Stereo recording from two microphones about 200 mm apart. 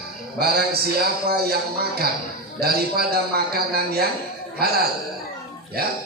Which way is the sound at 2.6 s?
50° right (ahead or behind).